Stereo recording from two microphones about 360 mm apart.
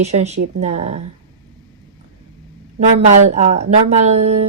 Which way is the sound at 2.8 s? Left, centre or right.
Centre.